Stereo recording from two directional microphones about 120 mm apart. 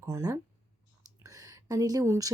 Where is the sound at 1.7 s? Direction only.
30° right (ahead or behind).